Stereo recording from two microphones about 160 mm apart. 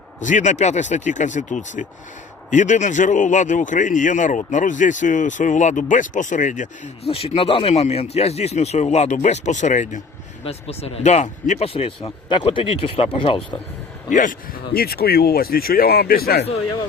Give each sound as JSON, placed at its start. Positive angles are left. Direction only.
{"t": 0.2, "sound": "a man's voice", "side_deg": 50}
{"t": 7.1, "sound": "a man's voice", "side_deg": 35}
{"t": 10.4, "sound": "speech", "side_deg": 40}
{"t": 14.1, "sound": "speech", "side_deg": 55}